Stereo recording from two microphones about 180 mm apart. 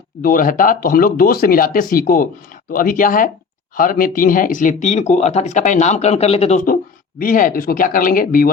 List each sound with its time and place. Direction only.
0.2 s speech: 50° left (ahead or behind); by 6.6 s 35° left (ahead or behind)
7.2 s speech: 50° left (ahead or behind)